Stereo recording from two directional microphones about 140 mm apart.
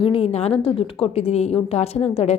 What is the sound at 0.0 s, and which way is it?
A woman's voice, 45° left (ahead or behind).